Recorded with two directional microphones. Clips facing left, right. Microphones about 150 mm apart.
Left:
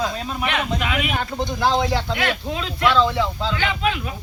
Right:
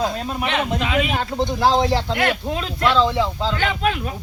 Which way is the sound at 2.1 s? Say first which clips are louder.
Right 3 dB; 45° right (ahead or behind).